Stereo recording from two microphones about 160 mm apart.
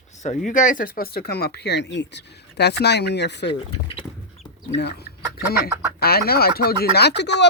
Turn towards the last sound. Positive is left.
turn(degrees=90)